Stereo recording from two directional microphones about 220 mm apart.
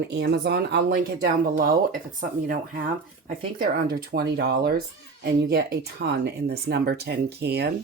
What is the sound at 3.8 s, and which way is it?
Speech, 45° right (ahead or behind).